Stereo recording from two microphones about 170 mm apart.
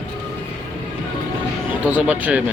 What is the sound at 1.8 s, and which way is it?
Speech, 10° right (ahead or behind).